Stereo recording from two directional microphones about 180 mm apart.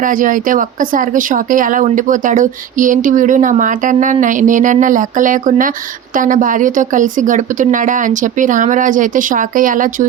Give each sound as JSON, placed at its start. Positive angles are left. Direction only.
{"t": 0.0, "sound": "speech", "side_deg": -50}